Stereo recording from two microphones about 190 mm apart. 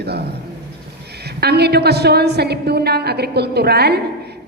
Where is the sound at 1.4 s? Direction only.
60° right (ahead or behind).